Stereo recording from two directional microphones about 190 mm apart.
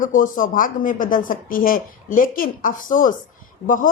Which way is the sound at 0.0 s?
45° left (ahead or behind).